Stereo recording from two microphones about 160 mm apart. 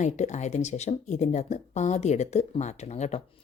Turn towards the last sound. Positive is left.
turn(degrees=45)  # may be behind; listen again after turning